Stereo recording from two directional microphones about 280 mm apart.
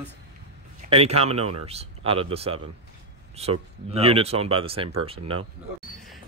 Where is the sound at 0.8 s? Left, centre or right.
Right.